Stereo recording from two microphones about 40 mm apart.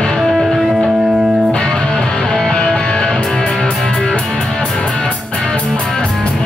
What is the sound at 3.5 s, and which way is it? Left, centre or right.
Music, centre.